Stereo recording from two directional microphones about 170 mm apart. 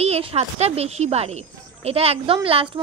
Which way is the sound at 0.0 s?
40° right (ahead or behind).